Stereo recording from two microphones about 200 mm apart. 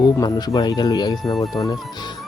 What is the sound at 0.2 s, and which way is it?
Speech, 20° left (ahead or behind).